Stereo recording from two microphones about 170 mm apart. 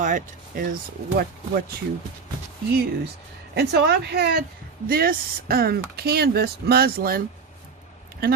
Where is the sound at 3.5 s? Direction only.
75° right (ahead or behind).